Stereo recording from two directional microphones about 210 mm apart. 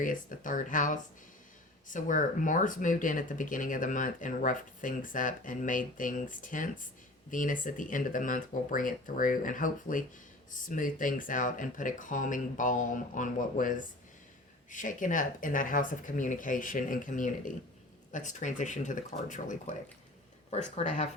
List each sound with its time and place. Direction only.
0.0 s speech: 40° left (ahead or behind)